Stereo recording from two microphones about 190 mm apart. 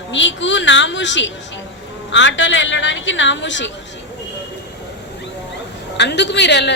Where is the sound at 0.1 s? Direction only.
75° left (ahead or behind).